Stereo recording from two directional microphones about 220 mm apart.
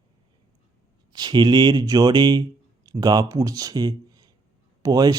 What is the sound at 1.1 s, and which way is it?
Speech, 20° right (ahead or behind).